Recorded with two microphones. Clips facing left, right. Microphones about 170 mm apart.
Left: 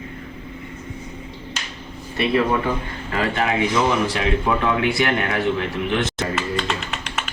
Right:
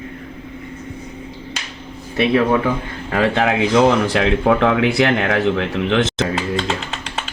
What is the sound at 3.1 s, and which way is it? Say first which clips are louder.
Speech: right 5 dB; 85° right.